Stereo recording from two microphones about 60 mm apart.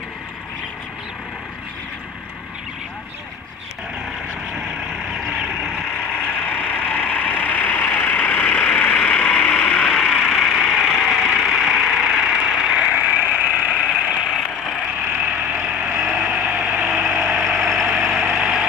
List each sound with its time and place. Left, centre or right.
5.9 s vehicle: left
9.8 s vehicle: centre
10.3 s vehicle: centre
12.9 s vehicle: right
14.2 s vehicle: centre
15.1 s vehicle: centre
16.1 s a sound: centre
17.2 s vehicle: centre